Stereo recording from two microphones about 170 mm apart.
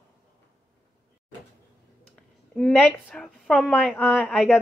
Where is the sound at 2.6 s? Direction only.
5° left (ahead or behind).